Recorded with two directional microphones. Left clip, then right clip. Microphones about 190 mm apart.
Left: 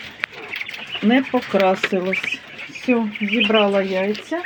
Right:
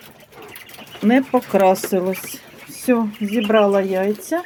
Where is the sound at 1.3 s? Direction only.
5° right (ahead or behind).